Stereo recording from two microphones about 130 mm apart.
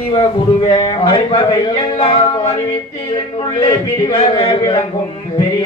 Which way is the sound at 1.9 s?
45° left (ahead or behind).